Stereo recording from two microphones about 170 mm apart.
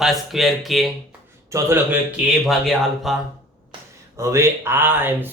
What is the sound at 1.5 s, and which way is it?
Speech, 15° right (ahead or behind).